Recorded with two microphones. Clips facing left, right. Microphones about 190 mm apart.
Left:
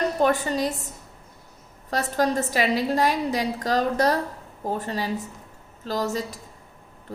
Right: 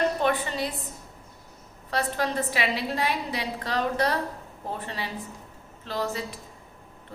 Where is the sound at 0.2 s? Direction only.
40° left (ahead or behind).